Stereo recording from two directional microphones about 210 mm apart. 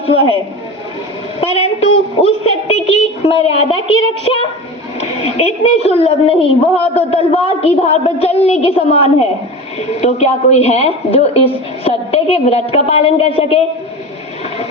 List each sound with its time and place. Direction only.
1.4 s a woman's voice: 30° left (ahead or behind)